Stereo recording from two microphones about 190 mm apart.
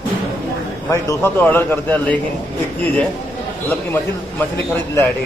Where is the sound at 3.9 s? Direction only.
10° left (ahead or behind).